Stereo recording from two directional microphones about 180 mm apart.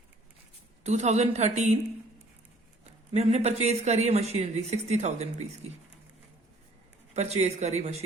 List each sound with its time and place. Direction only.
0.9 s speech: 40° right (ahead or behind)
3.1 s speech: 35° right (ahead or behind)
7.1 s speech: 35° right (ahead or behind)